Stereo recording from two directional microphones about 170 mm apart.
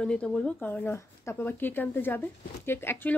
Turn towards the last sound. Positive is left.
turn(degrees=10)  # may be behind; listen again after turning